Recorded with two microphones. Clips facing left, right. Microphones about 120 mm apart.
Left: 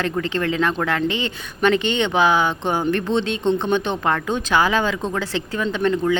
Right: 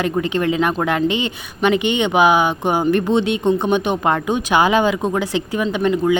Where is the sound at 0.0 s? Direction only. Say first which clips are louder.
Right 4 dB; 15° right (ahead or behind).